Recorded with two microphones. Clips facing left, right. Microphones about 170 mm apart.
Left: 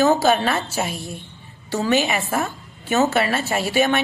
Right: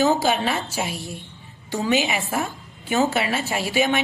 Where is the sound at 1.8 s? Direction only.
15° right (ahead or behind).